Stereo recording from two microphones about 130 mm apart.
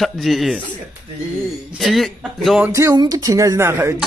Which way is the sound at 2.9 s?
30° right (ahead or behind).